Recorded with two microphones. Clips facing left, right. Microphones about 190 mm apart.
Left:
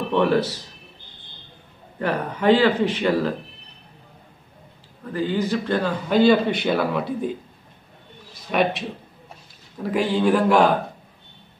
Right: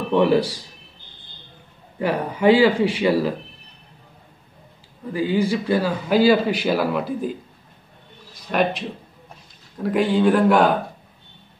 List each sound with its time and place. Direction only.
0.1 s speech: 10° right (ahead or behind)
2.0 s speech: 10° right (ahead or behind)
5.1 s a man's voice: 10° right (ahead or behind)
8.5 s a man's voice: centre (ahead or behind)
9.8 s a man's voice: centre (ahead or behind)